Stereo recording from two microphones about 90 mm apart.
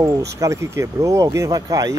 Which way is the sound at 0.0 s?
35° right (ahead or behind).